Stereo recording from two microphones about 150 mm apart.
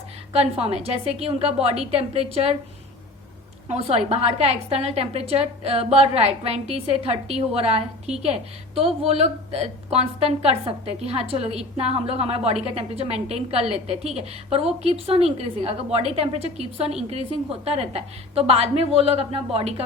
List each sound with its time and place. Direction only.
0.3 s a woman's voice: 40° right (ahead or behind)
3.7 s a woman's voice: 45° right (ahead or behind)